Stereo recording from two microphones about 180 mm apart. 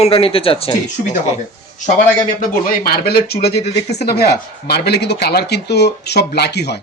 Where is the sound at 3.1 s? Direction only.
60° left (ahead or behind).